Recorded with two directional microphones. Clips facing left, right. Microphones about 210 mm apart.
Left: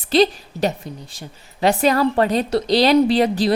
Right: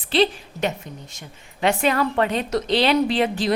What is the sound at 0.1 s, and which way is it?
A woman's voice, 40° left (ahead or behind).